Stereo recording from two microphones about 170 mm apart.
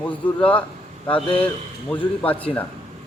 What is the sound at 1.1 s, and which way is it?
Speech, 30° left (ahead or behind).